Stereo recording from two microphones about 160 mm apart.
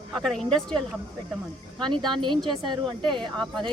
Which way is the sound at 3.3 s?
5° left (ahead or behind).